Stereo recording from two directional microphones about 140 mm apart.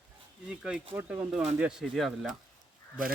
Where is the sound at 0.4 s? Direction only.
5° right (ahead or behind).